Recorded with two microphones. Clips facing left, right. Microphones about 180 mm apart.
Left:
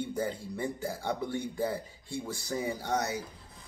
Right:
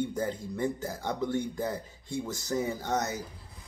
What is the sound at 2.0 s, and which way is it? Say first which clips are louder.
Speech: right 4 dB; 20° right (ahead or behind).